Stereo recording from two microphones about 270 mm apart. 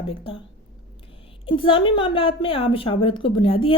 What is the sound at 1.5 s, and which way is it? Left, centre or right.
A woman's voice, centre.